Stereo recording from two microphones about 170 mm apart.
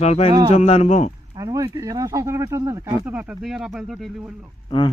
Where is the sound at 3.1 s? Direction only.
5° right (ahead or behind).